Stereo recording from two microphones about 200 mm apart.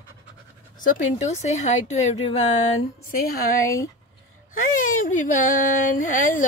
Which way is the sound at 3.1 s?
45° left (ahead or behind).